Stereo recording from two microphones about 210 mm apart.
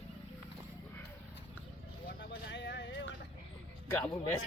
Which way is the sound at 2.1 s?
55° left (ahead or behind).